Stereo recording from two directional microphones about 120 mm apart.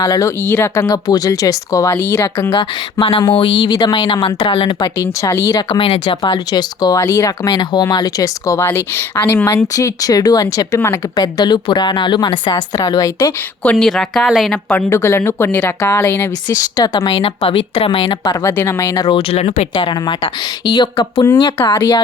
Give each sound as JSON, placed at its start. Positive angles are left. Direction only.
{"t": 0.0, "sound": "speech", "side_deg": 30}
{"t": 2.5, "sound": "speech", "side_deg": 45}
{"t": 3.7, "sound": "speech", "side_deg": 35}
{"t": 4.9, "sound": "speech", "side_deg": 25}
{"t": 5.8, "sound": "speech", "side_deg": 50}
{"t": 11.2, "sound": "speech", "side_deg": 35}
{"t": 13.7, "sound": "speech", "side_deg": 5}
{"t": 14.8, "sound": "speech", "side_deg": 25}
{"t": 16.7, "sound": "speech", "side_deg": 35}
{"t": 17.1, "sound": "speech", "side_deg": 45}
{"t": 18.4, "sound": "speech", "side_deg": 25}
{"t": 19.1, "sound": "speech", "side_deg": 60}
{"t": 19.7, "sound": "speech", "side_deg": 40}